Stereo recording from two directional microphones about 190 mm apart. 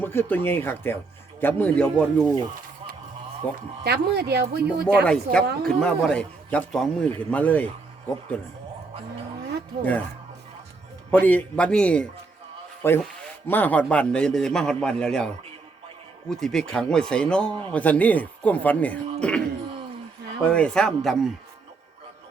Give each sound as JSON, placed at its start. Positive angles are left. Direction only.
{"t": 0.0, "sound": "speech", "side_deg": 10}
{"t": 3.4, "sound": "speech", "side_deg": 10}
{"t": 3.8, "sound": "speech", "side_deg": -60}
{"t": 5.0, "sound": "a man's voice", "side_deg": 5}
{"t": 11.1, "sound": "a man's voice", "side_deg": 10}
{"t": 16.3, "sound": "a man's voice", "side_deg": 0}